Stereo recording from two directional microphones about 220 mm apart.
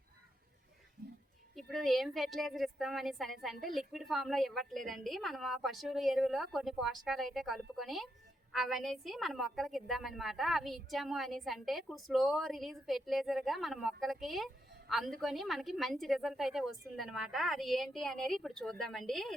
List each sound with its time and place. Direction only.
1.0 s whispering: 40° right (ahead or behind)
1.5 s a woman's voice: centre (ahead or behind)